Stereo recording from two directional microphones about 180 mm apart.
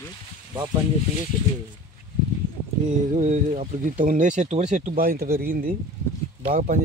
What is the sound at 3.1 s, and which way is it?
Speech, 40° right (ahead or behind).